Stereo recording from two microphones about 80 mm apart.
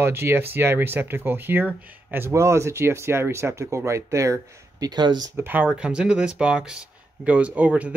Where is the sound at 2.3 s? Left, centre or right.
Right.